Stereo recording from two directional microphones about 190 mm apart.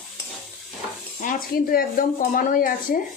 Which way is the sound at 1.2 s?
50° left (ahead or behind).